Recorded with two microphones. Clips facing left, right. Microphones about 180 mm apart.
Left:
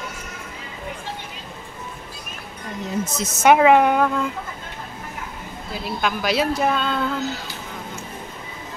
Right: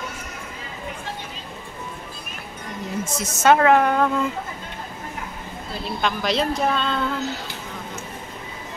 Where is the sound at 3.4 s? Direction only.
15° left (ahead or behind).